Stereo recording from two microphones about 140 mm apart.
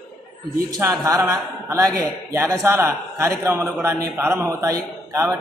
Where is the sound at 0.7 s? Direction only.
25° right (ahead or behind).